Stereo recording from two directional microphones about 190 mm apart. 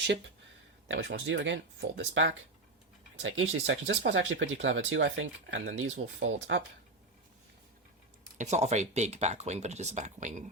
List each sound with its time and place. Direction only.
0.9 s speech: 80° right
3.2 s speech: 90° right
8.4 s speech: 35° right (ahead or behind)